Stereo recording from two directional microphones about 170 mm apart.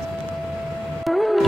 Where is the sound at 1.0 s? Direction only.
Centre (ahead or behind).